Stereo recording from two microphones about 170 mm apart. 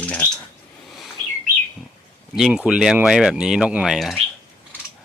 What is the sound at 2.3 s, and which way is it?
Speech, 5° right (ahead or behind).